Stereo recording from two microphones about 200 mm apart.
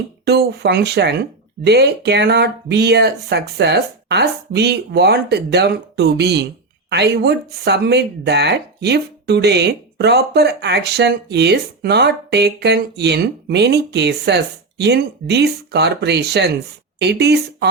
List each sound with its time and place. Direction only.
0.3 s speech: 55° right (ahead or behind)